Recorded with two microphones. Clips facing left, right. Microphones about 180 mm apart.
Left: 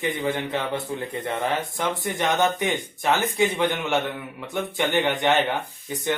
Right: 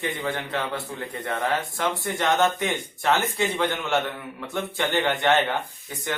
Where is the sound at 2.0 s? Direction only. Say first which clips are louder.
Even; 15° left (ahead or behind).